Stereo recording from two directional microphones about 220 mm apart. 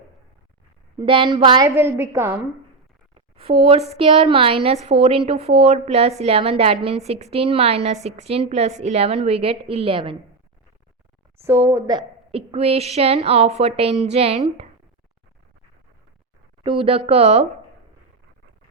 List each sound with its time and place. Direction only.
0.9 s a woman's voice: 25° right (ahead or behind)
3.2 s a woman's voice: 25° right (ahead or behind)
11.3 s a woman's voice: 10° right (ahead or behind); by 14.7 s 30° right (ahead or behind)
16.6 s a woman's voice: 25° right (ahead or behind)